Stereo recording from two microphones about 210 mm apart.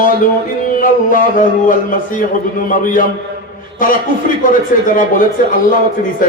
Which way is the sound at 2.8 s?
40° left (ahead or behind).